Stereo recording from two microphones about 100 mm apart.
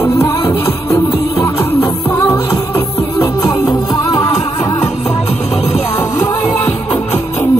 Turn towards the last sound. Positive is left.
turn(degrees=20)  # may be behind; listen again after turning